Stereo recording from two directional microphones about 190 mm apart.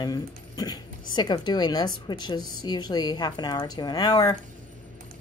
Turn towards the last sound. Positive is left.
turn(degrees=20)  # may be behind; listen again after turning